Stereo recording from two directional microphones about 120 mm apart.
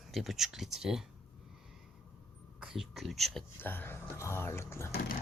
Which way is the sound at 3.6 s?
15° left (ahead or behind).